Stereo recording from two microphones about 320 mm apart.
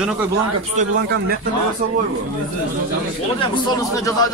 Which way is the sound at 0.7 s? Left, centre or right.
Right.